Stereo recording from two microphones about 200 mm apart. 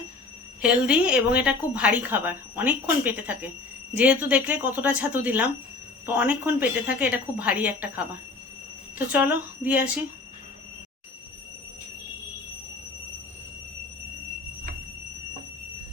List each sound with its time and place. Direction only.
0.6 s a woman's voice: 5° right (ahead or behind)
9.1 s a woman's voice: 5° right (ahead or behind)